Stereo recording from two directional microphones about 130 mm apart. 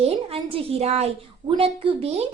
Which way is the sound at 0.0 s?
45° right (ahead or behind).